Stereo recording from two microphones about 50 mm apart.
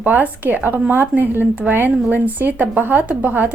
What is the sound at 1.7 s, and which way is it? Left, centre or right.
Speech, right.